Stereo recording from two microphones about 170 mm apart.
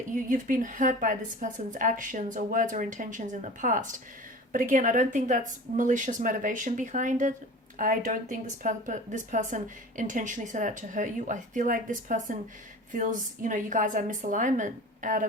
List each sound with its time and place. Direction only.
0.1 s a woman's voice: 50° right (ahead or behind)